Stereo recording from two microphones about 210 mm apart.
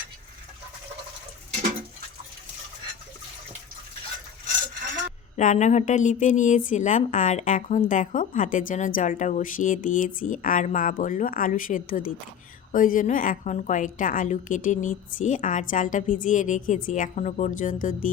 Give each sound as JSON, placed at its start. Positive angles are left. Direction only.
{"t": 5.4, "sound": "a woman's voice", "side_deg": 35}